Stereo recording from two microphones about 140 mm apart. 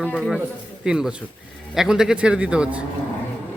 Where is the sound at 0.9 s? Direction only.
5° right (ahead or behind).